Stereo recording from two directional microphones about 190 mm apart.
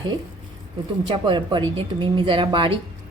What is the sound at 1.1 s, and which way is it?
Speech, 25° right (ahead or behind).